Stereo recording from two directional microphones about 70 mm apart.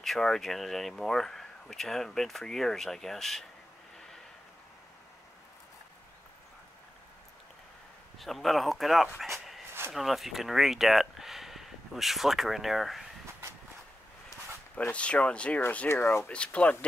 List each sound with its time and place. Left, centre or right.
0.0 s speech: centre
8.2 s speech: centre
14.9 s speech: centre
15.9 s speech: left
16.3 s speech: centre